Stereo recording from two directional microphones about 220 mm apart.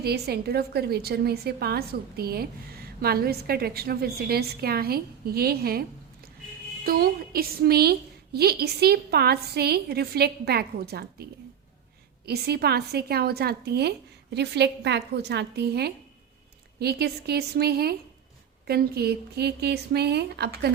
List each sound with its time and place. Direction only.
0.0 s a woman's voice: 45° right (ahead or behind)
6.8 s a woman's voice: 45° right (ahead or behind)
12.2 s a woman's voice: 45° right (ahead or behind)